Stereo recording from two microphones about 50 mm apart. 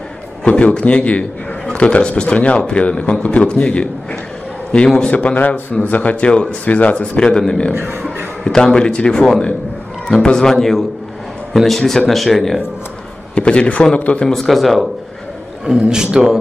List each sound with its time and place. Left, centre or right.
0.5 s speech: left; by 12.5 s centre
13.3 s speech: left
14.3 s speech: centre
15.7 s a man's voice: centre